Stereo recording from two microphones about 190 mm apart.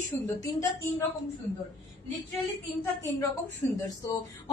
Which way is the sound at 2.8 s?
15° left (ahead or behind).